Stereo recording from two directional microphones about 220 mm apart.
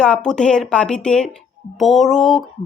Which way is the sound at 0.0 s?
5° left (ahead or behind).